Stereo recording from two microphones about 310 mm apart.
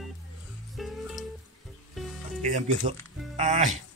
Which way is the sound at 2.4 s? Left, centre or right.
Right.